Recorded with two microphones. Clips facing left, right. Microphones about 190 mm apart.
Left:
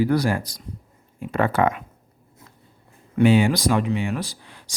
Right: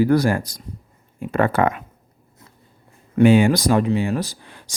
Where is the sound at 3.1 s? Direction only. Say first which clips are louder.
Right 3 dB; 50° right (ahead or behind).